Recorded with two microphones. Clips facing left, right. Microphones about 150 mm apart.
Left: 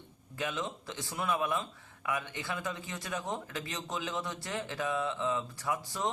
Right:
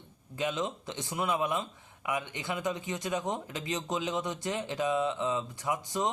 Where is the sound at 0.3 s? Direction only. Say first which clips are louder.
Right 4 dB; 20° right (ahead or behind).